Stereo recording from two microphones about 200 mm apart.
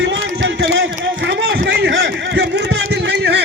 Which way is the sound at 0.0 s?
70° right (ahead or behind).